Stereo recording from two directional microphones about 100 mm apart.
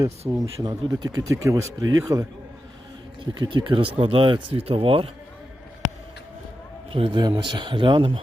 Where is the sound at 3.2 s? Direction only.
50° right (ahead or behind); by 5.0 s 65° right (ahead or behind).